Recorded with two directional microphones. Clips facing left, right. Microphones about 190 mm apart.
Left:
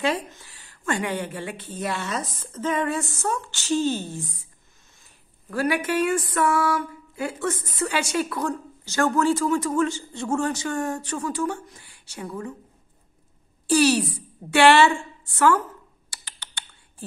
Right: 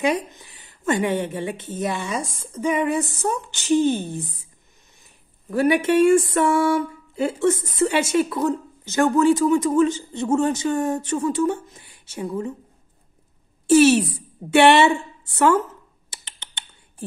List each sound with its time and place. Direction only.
0.0 s a woman's voice: 15° right (ahead or behind)
5.5 s a sound: 25° right (ahead or behind)
13.7 s a woman's voice: 20° right (ahead or behind)
16.1 s typing: 20° right (ahead or behind)